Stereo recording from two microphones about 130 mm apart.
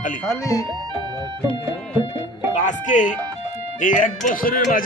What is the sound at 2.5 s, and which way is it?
Speech, 70° left (ahead or behind).